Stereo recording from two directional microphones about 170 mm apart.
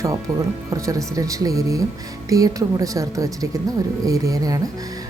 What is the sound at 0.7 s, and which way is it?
A woman's voice, 20° right (ahead or behind).